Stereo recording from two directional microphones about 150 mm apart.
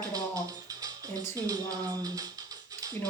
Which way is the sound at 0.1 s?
25° right (ahead or behind).